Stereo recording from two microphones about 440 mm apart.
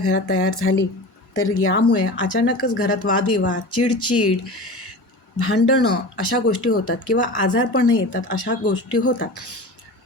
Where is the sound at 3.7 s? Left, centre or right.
Left.